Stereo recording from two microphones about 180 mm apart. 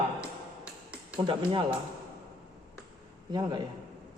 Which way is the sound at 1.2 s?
25° right (ahead or behind).